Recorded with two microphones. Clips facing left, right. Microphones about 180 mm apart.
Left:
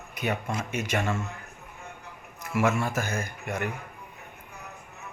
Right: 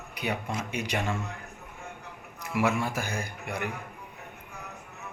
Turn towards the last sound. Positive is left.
turn(degrees=-15)  # may be behind; listen again after turning